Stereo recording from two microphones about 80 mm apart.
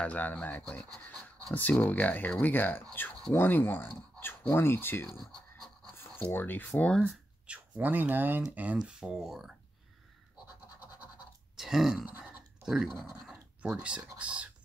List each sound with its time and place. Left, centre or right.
0.0 s speech: left
5.2 s scratch: centre
6.2 s speech: left
6.8 s speech: centre
7.4 s speech: centre
9.0 s speech: centre
11.5 s grunt: centre
12.6 s speech: centre